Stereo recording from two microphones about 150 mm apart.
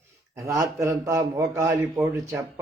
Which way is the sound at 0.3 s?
20° right (ahead or behind).